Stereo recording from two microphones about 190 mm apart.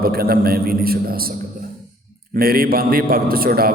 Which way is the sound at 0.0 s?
50° right (ahead or behind).